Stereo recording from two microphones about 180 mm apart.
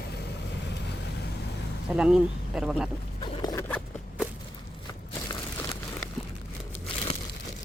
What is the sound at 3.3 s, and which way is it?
Zipper, 20° left (ahead or behind).